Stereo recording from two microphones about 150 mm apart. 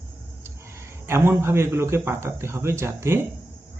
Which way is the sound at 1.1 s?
15° right (ahead or behind).